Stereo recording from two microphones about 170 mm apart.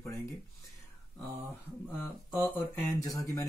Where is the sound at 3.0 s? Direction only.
20° left (ahead or behind).